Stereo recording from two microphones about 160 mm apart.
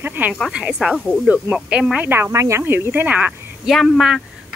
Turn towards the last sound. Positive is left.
turn(degrees=0)  # may be behind; listen again after turning